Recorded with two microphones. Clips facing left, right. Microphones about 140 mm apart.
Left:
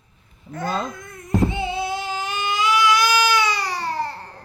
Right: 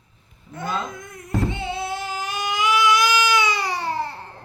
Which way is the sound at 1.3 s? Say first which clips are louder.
Left 4 dB; centre (ahead or behind).